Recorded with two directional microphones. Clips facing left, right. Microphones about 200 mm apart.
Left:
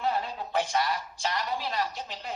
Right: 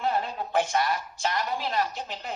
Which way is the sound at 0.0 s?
55° right (ahead or behind).